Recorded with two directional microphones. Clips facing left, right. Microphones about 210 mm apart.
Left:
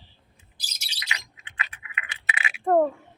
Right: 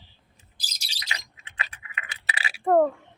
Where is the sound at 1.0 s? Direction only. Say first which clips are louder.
Left 1 dB; 35° right (ahead or behind).